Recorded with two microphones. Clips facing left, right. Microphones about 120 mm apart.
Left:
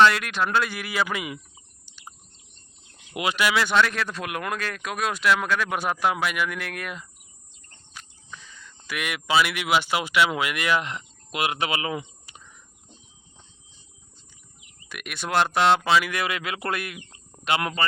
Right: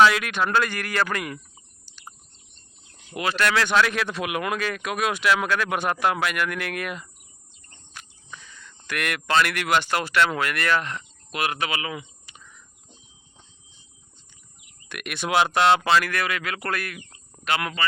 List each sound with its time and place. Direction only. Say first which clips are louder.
0.0 s speech: right 1 dB; centre (ahead or behind)
3.2 s speech: even; 15° left (ahead or behind); by 7.1 s centre (ahead or behind)
8.9 s speech: right 1 dB; 5° left (ahead or behind); by 12.4 s 30° left (ahead or behind)
14.8 s speech: right 3 dB; centre (ahead or behind)
16.2 s speech: even; 25° left (ahead or behind)